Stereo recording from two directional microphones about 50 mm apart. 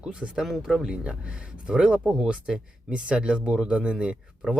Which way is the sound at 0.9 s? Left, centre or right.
Right.